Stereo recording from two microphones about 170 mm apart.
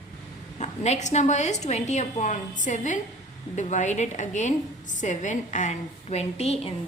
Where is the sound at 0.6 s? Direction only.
40° left (ahead or behind).